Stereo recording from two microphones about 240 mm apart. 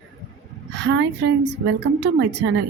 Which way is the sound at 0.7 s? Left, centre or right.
Right.